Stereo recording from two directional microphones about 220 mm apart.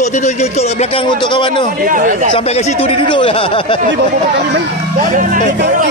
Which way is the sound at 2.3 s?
30° left (ahead or behind).